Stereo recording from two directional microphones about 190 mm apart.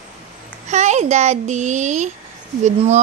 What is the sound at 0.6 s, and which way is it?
A child's voice, 35° right (ahead or behind).